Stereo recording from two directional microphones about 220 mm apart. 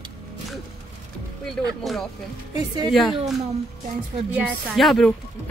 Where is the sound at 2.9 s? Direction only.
Centre (ahead or behind).